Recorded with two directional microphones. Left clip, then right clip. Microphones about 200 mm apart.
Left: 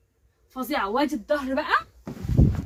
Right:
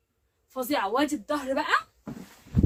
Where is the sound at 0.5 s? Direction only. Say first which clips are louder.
Left 1 dB; 55° right (ahead or behind).